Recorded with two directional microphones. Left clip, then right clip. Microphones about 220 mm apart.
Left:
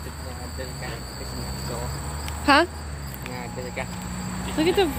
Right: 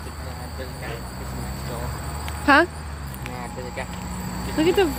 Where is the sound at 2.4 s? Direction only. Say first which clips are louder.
Right 2 dB; 5° right (ahead or behind).